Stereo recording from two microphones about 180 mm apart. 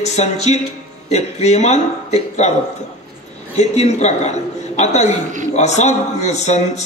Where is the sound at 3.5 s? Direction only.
40° left (ahead or behind).